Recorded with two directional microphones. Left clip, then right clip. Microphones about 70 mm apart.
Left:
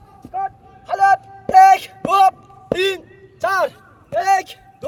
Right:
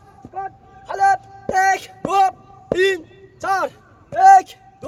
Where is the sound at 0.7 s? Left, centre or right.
Right.